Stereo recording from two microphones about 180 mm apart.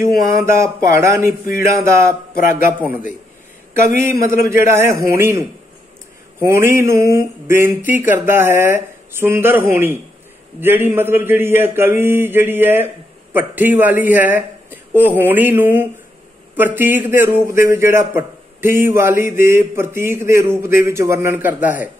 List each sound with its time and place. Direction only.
0.3 s a man's voice: 15° right (ahead or behind)
4.0 s a man's voice: 15° right (ahead or behind)